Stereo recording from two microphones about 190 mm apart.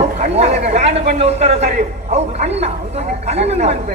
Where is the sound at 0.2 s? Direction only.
35° right (ahead or behind).